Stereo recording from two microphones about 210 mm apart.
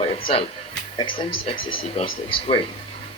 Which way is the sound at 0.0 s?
30° left (ahead or behind).